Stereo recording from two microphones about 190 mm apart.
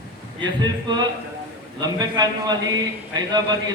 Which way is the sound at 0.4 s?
20° right (ahead or behind).